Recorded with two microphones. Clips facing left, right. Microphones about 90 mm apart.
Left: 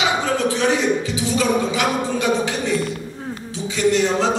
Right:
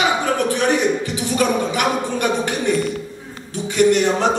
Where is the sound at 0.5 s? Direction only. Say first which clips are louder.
Right 1 dB; 60° right (ahead or behind).